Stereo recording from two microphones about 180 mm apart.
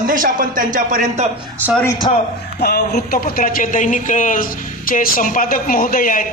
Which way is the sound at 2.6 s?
65° left (ahead or behind).